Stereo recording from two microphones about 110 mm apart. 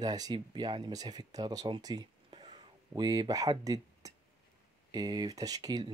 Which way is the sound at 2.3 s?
55° right (ahead or behind).